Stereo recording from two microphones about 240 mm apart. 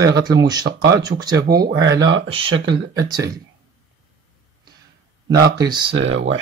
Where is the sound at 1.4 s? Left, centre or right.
Right.